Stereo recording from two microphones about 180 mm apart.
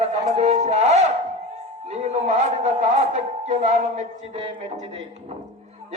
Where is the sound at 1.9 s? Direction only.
35° right (ahead or behind).